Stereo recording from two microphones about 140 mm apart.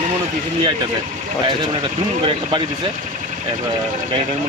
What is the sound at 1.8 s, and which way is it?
Speech, 35° right (ahead or behind).